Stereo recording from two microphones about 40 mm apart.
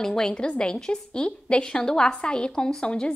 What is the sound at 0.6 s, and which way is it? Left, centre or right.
A woman's voice, left.